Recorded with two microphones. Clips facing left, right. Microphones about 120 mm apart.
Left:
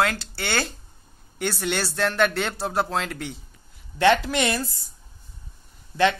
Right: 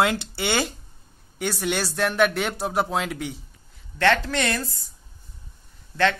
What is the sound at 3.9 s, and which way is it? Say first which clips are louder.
Speech: left 2 dB; 10° left (ahead or behind).